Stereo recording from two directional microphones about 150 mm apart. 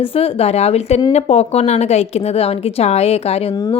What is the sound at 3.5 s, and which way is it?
Speech, 30° left (ahead or behind).